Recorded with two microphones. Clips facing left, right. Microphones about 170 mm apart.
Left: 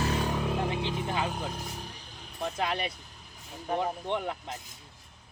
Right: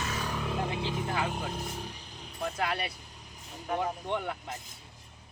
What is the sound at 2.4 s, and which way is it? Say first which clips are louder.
Speech: left 1 dB; 20° left (ahead or behind).